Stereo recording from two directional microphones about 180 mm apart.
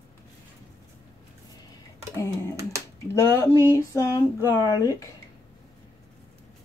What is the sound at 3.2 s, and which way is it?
Speech, 15° left (ahead or behind).